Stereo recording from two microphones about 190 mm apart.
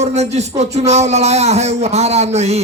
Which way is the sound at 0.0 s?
35° right (ahead or behind).